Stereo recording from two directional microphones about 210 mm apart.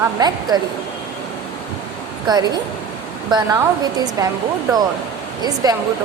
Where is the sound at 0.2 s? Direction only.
20° right (ahead or behind).